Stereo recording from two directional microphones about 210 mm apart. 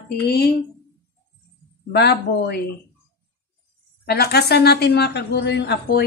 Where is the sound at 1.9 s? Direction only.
50° left (ahead or behind).